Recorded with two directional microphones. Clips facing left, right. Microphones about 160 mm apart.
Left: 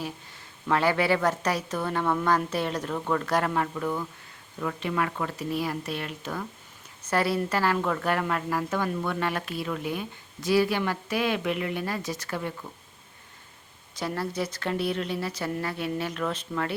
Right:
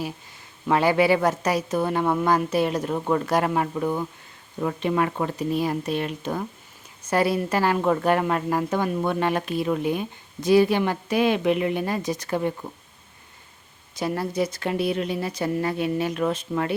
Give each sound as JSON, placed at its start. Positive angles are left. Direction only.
{"t": 0.7, "sound": "a woman's voice", "side_deg": -15}
{"t": 14.0, "sound": "a woman's voice", "side_deg": -15}